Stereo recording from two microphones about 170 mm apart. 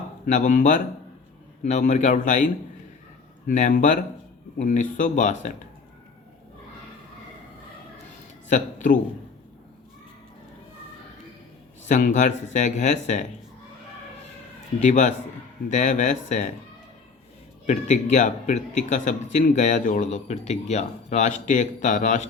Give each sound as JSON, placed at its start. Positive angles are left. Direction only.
{"t": 0.3, "sound": "a man's voice", "side_deg": 45}
{"t": 8.4, "sound": "a man's voice", "side_deg": 45}
{"t": 11.9, "sound": "a man's voice", "side_deg": 45}
{"t": 14.8, "sound": "a man's voice", "side_deg": 45}
{"t": 17.7, "sound": "a man's voice", "side_deg": 45}